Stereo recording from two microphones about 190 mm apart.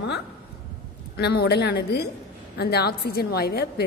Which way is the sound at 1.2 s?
60° left (ahead or behind).